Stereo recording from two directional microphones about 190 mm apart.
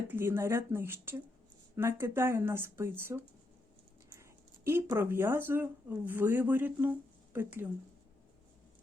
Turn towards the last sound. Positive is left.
turn(degrees=-10)  # may be behind; listen again after turning